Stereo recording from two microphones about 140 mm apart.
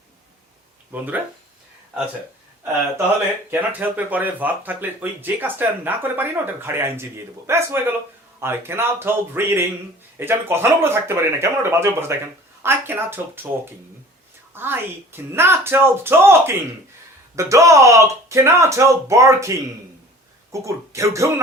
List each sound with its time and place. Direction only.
3.5 s speech: 10° right (ahead or behind)
14.5 s speech: 15° right (ahead or behind)